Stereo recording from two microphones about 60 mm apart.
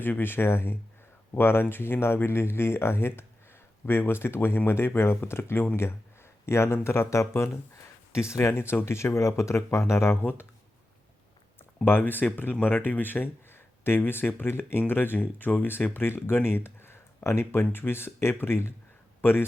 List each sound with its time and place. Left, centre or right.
0.0 s speech: left
8.7 s speech: left
11.9 s speech: left